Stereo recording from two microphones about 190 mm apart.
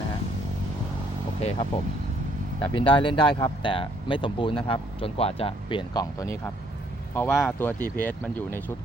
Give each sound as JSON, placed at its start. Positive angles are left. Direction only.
{"t": 1.4, "sound": "speech", "side_deg": 35}